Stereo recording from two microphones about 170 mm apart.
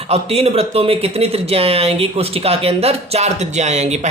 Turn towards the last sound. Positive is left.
turn(degrees=-40)  # may be behind; listen again after turning